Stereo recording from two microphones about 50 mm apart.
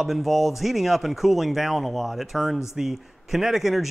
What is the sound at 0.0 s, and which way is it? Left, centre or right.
Speech, centre.